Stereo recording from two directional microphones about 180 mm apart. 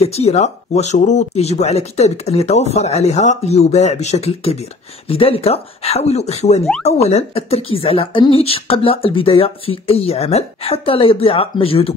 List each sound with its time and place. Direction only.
0.0 s speech: 35° left (ahead or behind)